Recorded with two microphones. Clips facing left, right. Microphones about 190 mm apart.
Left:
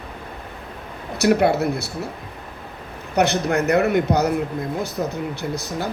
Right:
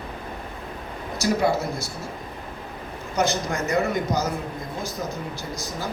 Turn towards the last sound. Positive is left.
turn(degrees=65)  # may be behind; listen again after turning